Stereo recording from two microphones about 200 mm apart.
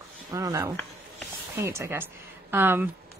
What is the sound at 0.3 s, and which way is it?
Speech, 15° right (ahead or behind).